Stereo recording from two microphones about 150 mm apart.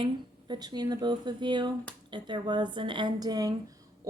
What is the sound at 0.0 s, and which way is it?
A woman's voice, 30° right (ahead or behind).